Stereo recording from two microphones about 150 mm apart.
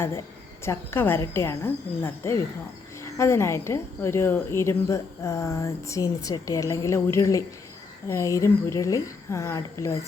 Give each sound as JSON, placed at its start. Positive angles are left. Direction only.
{"t": 0.6, "sound": "a woman's voice", "side_deg": 15}